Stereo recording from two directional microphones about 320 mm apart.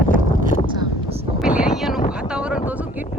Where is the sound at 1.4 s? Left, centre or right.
Centre.